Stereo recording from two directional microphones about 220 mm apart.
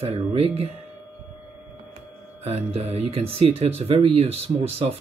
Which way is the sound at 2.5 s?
30° right (ahead or behind).